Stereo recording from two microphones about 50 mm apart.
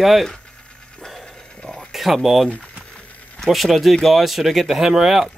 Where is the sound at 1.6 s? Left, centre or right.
Centre.